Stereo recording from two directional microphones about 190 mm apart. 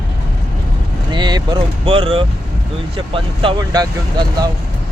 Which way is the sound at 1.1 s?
20° right (ahead or behind).